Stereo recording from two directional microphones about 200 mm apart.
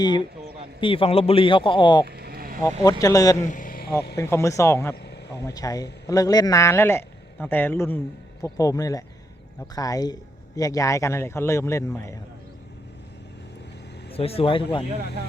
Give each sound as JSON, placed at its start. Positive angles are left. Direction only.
{"t": 0.2, "sound": "a sound", "side_deg": -30}
{"t": 0.8, "sound": "a man's voice", "side_deg": 25}
{"t": 2.0, "sound": "vehicle", "side_deg": -50}
{"t": 2.8, "sound": "a man's voice", "side_deg": 15}
{"t": 3.5, "sound": "a sound", "side_deg": 40}
{"t": 4.2, "sound": "a man's voice", "side_deg": 15}
{"t": 14.1, "sound": "a man's voice", "side_deg": 30}